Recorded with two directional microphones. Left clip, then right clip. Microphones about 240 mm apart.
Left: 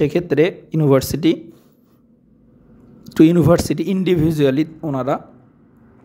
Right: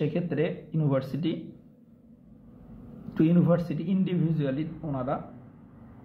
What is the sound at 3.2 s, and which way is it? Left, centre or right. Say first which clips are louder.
A man's voice: left 12 dB; left.